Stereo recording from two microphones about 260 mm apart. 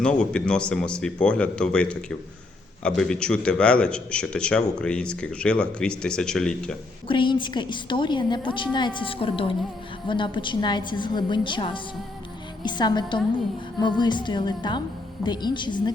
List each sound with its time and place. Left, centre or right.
0.0 s a man's voice: centre
7.1 s a woman's voice: centre